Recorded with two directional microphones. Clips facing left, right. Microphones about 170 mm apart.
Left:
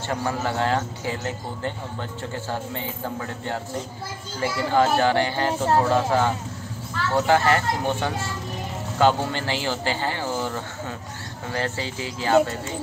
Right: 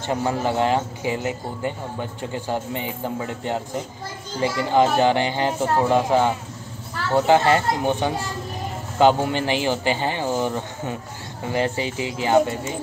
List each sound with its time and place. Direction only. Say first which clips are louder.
0.1 s speech: right 4 dB; 20° right (ahead or behind)